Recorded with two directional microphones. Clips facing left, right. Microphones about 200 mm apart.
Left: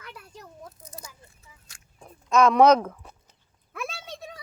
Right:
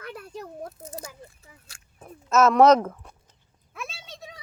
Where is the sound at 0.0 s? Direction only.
55° right (ahead or behind).